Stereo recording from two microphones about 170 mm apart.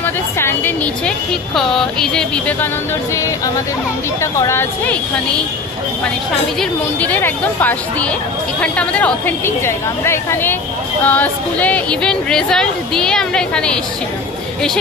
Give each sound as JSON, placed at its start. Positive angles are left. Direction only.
{"t": 0.0, "sound": "a sound", "side_deg": 15}
{"t": 1.5, "sound": "speech", "side_deg": 0}
{"t": 4.2, "sound": "a woman's voice", "side_deg": 15}
{"t": 6.6, "sound": "a woman's voice", "side_deg": 10}